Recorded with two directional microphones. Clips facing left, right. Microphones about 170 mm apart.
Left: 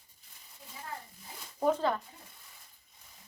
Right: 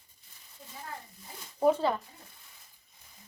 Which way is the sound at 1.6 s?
10° right (ahead or behind).